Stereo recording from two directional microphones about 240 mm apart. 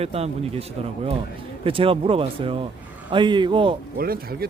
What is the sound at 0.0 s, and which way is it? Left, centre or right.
Speech, right.